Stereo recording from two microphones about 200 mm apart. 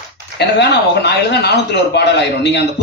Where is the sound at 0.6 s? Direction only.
55° left (ahead or behind).